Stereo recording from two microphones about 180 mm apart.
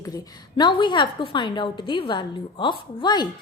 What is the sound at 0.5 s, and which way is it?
A woman's voice, 25° left (ahead or behind).